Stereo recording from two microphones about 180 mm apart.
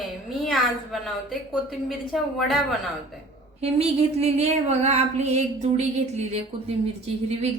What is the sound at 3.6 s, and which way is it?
A woman's voice, 35° right (ahead or behind).